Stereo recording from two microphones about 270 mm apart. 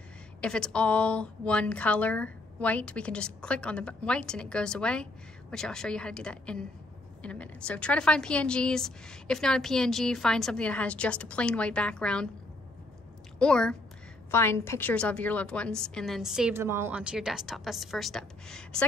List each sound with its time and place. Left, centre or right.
0.4 s a woman's voice: centre
13.4 s a woman's voice: centre